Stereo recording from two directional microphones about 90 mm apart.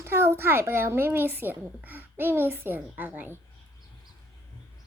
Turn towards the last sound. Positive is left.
turn(degrees=-20)  # may be behind; listen again after turning